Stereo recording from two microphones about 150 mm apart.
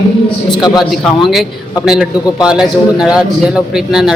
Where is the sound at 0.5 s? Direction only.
30° left (ahead or behind).